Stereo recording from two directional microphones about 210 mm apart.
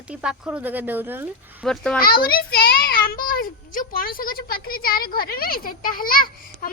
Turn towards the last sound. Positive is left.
turn(degrees=40)  # may be behind; listen again after turning